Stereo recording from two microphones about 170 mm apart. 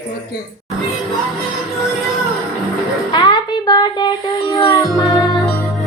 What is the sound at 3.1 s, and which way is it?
Music, 25° left (ahead or behind).